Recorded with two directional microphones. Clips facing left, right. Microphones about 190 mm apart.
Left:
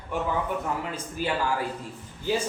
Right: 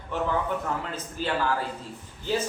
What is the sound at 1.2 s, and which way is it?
Speech, 10° left (ahead or behind).